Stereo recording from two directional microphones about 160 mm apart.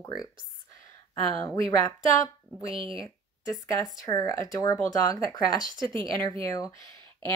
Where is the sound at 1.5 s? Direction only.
20° left (ahead or behind).